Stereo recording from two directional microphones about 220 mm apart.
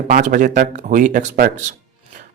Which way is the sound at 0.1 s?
40° right (ahead or behind).